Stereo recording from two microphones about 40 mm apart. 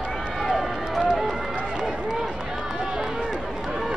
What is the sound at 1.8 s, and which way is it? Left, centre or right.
Run, centre.